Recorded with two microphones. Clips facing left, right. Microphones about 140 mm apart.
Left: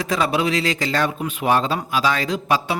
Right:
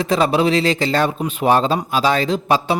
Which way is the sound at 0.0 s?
30° right (ahead or behind).